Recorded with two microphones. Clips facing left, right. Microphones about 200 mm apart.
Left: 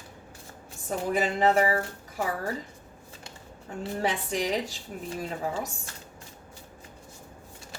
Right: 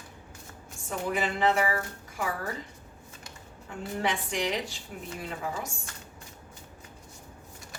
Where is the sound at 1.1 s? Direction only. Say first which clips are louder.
Left 3 dB; 40° left (ahead or behind).